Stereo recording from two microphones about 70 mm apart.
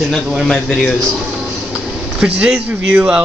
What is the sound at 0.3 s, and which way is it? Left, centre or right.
Speech, centre.